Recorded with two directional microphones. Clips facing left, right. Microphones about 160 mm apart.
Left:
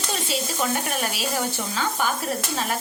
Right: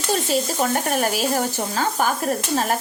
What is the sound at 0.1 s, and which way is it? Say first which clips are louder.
Speech: right 7 dB; 45° right (ahead or behind).